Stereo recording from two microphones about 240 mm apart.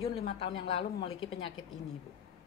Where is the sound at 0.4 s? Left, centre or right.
Left.